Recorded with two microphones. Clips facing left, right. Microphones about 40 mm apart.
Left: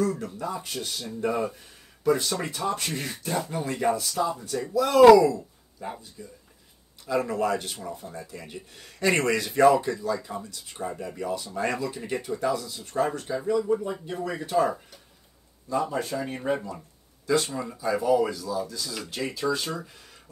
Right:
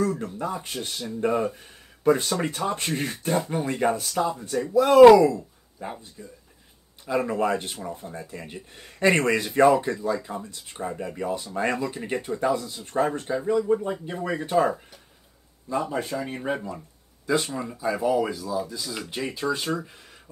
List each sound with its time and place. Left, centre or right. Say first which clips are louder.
0.1 s speech: right 2 dB; right
4.4 s speech: right 4 dB; right
6.2 s speech: even; centre